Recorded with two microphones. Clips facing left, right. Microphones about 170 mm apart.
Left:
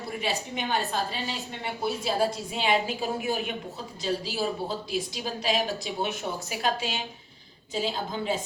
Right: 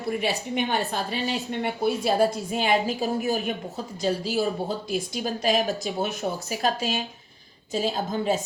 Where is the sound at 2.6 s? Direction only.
40° right (ahead or behind).